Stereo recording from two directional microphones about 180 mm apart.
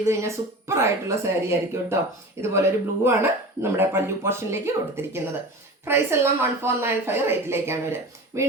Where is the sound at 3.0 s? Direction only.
10° right (ahead or behind).